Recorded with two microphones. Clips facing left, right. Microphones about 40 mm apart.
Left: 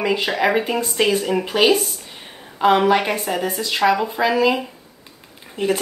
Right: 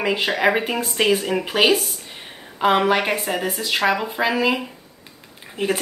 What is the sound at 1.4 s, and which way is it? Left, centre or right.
A woman's voice, right.